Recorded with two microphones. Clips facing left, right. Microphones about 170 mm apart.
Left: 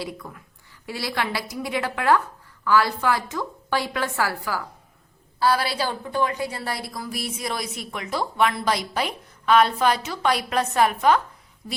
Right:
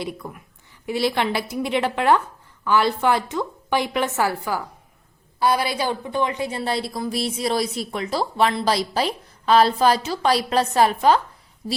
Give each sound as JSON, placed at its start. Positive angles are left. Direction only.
{"t": 0.2, "sound": "a woman's voice", "side_deg": -20}